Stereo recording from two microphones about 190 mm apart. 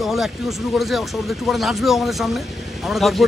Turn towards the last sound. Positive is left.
turn(degrees=0)  # may be behind; listen again after turning